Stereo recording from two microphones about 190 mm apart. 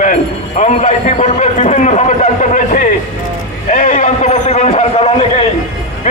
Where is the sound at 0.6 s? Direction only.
35° left (ahead or behind).